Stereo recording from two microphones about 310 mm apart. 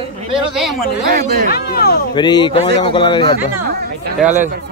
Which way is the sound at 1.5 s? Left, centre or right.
Left.